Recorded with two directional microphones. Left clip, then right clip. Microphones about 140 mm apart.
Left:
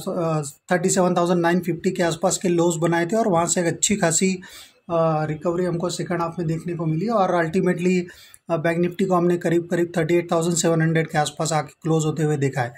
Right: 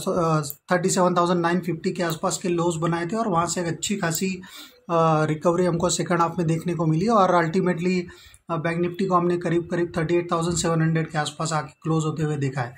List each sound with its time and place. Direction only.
0.0 s speech: centre (ahead or behind)
0.7 s speech: 15° left (ahead or behind); by 4.4 s 45° left (ahead or behind)
4.8 s speech: 5° right (ahead or behind)
7.6 s speech: 20° left (ahead or behind); by 12.6 s 35° left (ahead or behind)